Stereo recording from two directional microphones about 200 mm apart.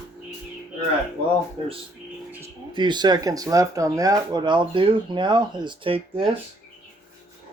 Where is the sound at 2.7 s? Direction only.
20° right (ahead or behind).